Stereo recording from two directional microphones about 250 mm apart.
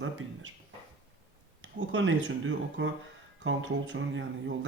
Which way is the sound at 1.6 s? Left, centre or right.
Right.